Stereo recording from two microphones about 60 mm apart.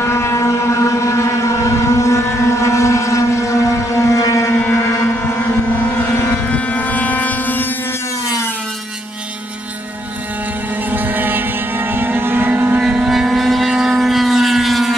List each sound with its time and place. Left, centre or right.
0.0 s boat: left
6.1 s vehicle: left
6.5 s vehicle: left
10.9 s vehicle: right
12.8 s vehicle: centre